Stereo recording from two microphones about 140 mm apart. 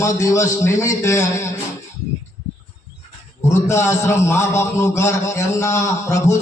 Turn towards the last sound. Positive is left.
turn(degrees=20)  # may be behind; listen again after turning